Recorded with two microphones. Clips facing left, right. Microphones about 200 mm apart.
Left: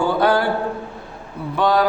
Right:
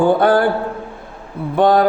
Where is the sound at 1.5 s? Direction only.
50° right (ahead or behind).